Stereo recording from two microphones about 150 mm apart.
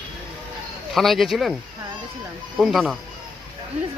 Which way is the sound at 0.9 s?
Centre (ahead or behind).